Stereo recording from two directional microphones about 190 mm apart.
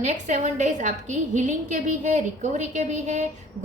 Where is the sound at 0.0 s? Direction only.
40° right (ahead or behind).